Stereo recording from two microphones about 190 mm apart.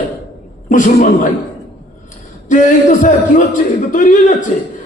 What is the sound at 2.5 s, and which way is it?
A man's voice, 40° left (ahead or behind).